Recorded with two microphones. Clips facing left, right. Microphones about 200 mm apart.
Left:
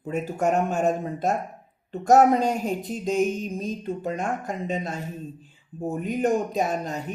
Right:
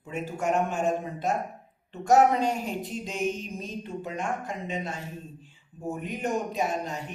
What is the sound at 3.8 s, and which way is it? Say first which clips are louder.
A woman's voice: left 5 dB; 40° left (ahead or behind).